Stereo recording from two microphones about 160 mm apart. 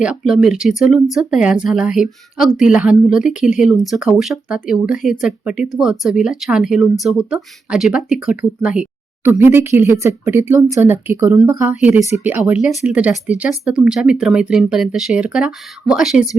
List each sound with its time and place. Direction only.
0.0 s speech: 5° right (ahead or behind)